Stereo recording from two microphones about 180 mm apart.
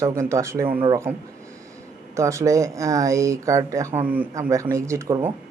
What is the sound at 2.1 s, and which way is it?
Speech, 15° right (ahead or behind).